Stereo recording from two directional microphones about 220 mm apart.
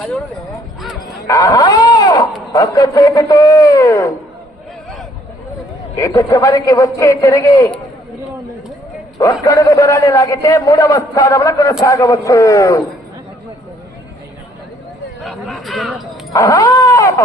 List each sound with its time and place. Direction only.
0.0 s speech: 5° left (ahead or behind)
1.3 s speech: 15° left (ahead or behind)
6.0 s a man's voice: 15° left (ahead or behind)
9.4 s a man's voice: 15° left (ahead or behind)
15.2 s speech: centre (ahead or behind)
16.3 s a man's voice: 15° left (ahead or behind)